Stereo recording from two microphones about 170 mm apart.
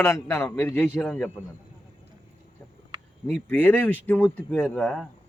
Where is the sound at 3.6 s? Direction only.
10° left (ahead or behind).